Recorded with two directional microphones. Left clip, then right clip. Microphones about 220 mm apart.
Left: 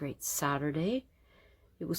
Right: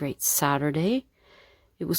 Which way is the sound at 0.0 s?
40° right (ahead or behind).